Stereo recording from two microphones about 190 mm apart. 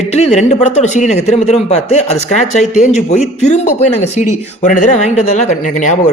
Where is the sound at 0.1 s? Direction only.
35° left (ahead or behind).